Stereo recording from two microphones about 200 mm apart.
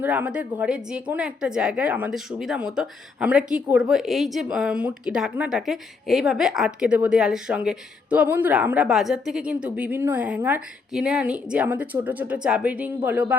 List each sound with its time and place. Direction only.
0.0 s a woman's voice: 10° right (ahead or behind)